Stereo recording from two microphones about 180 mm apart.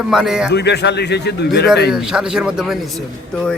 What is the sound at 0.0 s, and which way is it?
Speech, 5° right (ahead or behind).